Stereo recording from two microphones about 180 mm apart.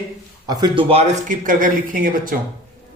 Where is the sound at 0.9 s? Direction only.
40° right (ahead or behind).